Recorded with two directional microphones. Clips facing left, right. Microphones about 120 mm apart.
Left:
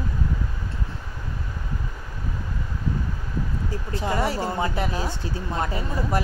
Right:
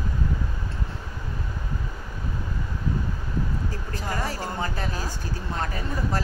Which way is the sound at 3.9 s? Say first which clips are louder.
Left 6 dB; 25° left (ahead or behind).